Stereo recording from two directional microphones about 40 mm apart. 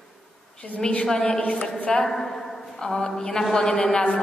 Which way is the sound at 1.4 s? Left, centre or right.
Left.